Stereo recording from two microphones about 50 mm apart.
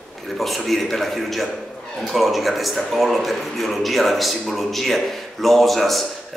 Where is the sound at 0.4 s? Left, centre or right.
Centre.